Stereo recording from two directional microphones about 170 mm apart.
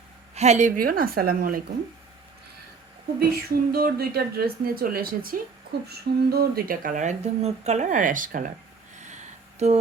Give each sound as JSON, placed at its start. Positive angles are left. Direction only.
{"t": 0.3, "sound": "speech", "side_deg": -40}
{"t": 0.8, "sound": "speech", "side_deg": -60}
{"t": 3.2, "sound": "speech", "side_deg": -65}